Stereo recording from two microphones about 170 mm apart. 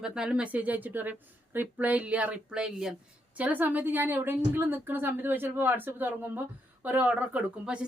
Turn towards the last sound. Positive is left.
turn(degrees=-5)  # may be behind; listen again after turning